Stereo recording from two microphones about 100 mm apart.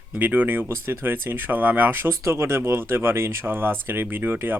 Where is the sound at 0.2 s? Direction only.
20° right (ahead or behind).